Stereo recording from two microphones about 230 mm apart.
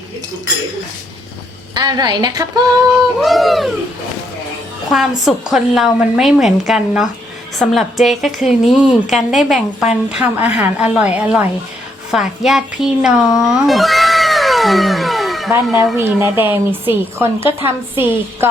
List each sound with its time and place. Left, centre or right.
1.7 s a woman's voice: centre
3.2 s a woman's voice: centre
4.9 s a woman's voice: centre